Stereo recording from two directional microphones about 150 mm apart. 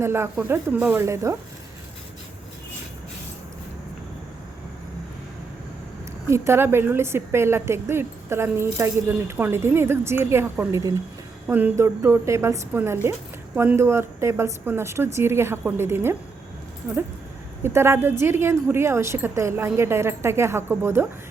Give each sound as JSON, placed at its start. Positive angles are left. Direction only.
{"t": 0.0, "sound": "a woman's voice", "side_deg": -15}
{"t": 6.2, "sound": "a woman's voice", "side_deg": -15}
{"t": 17.6, "sound": "a woman's voice", "side_deg": -15}